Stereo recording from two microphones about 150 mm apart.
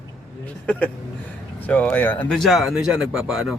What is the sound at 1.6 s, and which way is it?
Speech, 10° left (ahead or behind).